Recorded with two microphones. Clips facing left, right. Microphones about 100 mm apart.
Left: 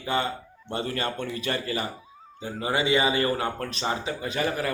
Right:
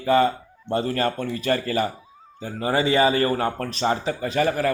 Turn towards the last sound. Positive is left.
turn(degrees=-40)  # may be behind; listen again after turning